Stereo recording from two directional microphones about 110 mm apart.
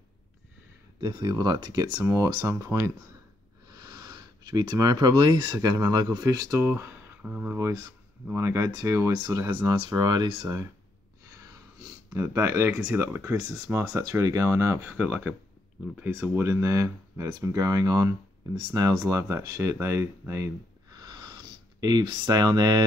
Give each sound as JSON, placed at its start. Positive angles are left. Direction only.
{"t": 1.0, "sound": "speech", "side_deg": -35}
{"t": 6.6, "sound": "speech", "side_deg": -20}
{"t": 7.5, "sound": "speech", "side_deg": -30}
{"t": 12.1, "sound": "speech", "side_deg": -30}
{"t": 14.9, "sound": "speech", "side_deg": -15}
{"t": 20.9, "sound": "a sound", "side_deg": -40}